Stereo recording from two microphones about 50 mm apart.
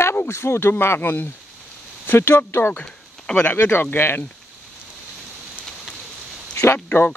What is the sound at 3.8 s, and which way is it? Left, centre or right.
Speech, left.